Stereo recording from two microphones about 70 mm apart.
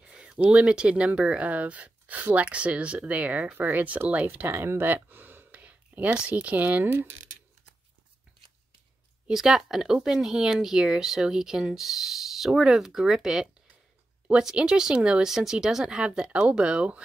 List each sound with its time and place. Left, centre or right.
0.0 s speech: centre; by 7.2 s right
9.3 s speech: centre